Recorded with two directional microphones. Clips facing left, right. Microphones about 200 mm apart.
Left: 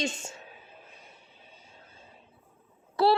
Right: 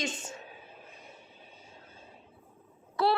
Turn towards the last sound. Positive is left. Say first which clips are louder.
# left 4 dB
turn(degrees=30)  # may be behind; listen again after turning